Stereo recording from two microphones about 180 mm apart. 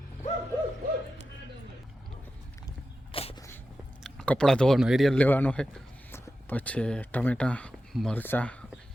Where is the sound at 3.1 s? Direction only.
30° left (ahead or behind).